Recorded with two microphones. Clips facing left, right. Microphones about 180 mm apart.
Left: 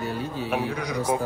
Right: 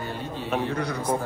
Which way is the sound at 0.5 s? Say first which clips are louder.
Right 1 dB; 5° left (ahead or behind).